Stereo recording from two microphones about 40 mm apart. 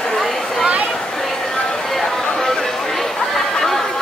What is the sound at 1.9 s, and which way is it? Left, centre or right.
Chatter, centre.